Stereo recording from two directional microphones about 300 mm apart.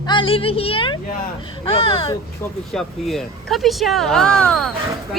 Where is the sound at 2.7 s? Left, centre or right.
Centre.